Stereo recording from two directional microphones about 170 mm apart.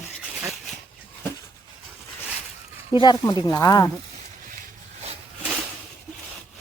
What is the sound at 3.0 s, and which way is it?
Speech, 25° left (ahead or behind).